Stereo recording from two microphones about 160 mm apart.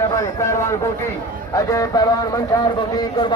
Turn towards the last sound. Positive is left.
turn(degrees=25)  # may be behind; listen again after turning